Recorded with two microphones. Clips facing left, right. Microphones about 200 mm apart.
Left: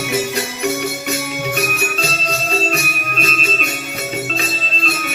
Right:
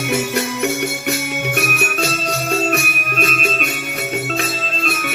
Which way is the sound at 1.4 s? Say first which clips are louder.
Even; 60° right (ahead or behind).